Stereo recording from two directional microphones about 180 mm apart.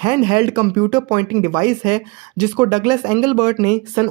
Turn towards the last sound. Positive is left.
turn(degrees=-20)  # may be behind; listen again after turning